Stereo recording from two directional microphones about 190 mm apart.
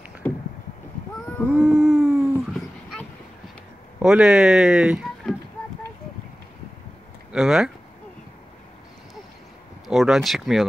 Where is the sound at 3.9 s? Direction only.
5° right (ahead or behind).